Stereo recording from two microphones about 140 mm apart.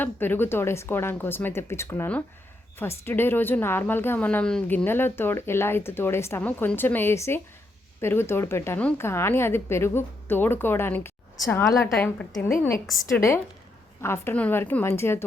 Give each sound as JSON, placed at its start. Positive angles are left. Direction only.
{"t": 0.0, "sound": "a woman's voice", "side_deg": 15}